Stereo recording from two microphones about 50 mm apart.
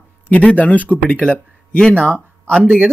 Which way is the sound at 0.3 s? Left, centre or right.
Left.